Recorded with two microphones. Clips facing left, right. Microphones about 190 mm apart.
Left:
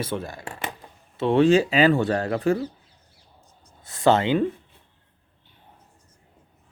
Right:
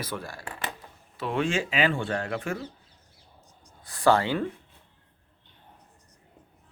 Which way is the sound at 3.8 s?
25° left (ahead or behind).